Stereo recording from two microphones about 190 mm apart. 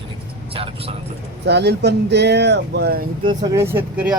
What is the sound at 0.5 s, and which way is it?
Speech, 30° right (ahead or behind).